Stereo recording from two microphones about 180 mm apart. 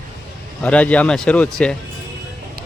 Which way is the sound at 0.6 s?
5° left (ahead or behind).